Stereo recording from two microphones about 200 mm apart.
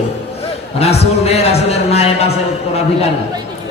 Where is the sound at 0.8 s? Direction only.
30° left (ahead or behind).